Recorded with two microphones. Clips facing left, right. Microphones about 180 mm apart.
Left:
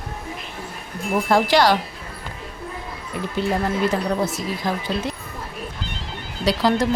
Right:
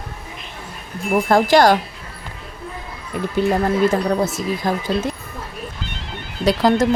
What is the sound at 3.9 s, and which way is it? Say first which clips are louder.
Speech: right 3 dB; 45° right (ahead or behind).